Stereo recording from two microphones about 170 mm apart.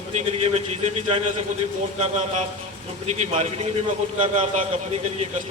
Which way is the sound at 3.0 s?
40° right (ahead or behind).